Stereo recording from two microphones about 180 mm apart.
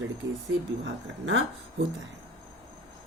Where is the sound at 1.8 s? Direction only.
90° right.